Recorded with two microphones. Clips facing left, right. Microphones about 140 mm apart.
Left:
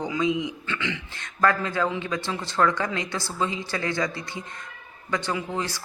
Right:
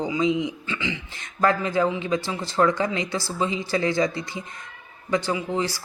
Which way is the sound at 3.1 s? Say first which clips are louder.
Right 2 dB; 10° right (ahead or behind).